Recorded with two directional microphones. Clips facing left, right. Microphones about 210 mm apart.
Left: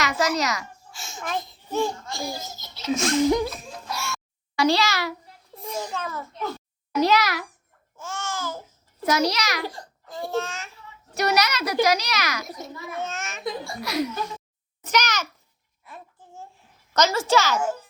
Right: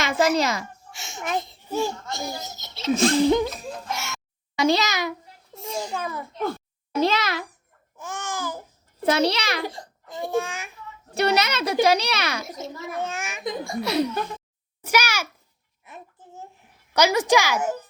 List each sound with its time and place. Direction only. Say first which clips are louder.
0.0 s a child's voice: right 3 dB; 25° right (ahead or behind)
3.0 s speech: right 2 dB; 35° right (ahead or behind)
3.9 s babbling: left 1 dB; 20° right (ahead or behind)
5.5 s a child's voice: right 1 dB; 25° right (ahead or behind)
6.9 s a child's voice: left 1 dB; 25° right (ahead or behind)
7.9 s babbling: even; 15° right (ahead or behind)
9.0 s a child's voice: right 2 dB; 30° right (ahead or behind); by 10.7 s 15° right (ahead or behind)
11.1 s a child's voice: right 1 dB; 30° right (ahead or behind)
13.0 s a child's voice: right 1 dB; 15° right (ahead or behind)
13.8 s a child's voice: right 3 dB; 30° right (ahead or behind)
14.8 s a child's voice: right 1 dB; 10° right (ahead or behind)
15.8 s a sound: right 1 dB; 20° right (ahead or behind)